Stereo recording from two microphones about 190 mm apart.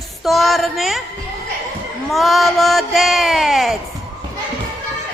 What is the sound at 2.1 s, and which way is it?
A woman's voice, centre (ahead or behind).